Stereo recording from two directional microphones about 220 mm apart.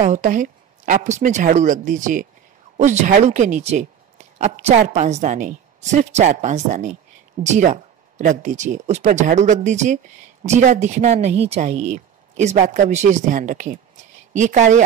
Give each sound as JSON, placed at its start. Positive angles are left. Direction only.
{"t": 0.0, "sound": "speech", "side_deg": -35}